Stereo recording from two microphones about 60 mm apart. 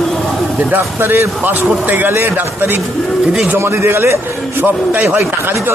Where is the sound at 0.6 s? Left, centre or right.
Right.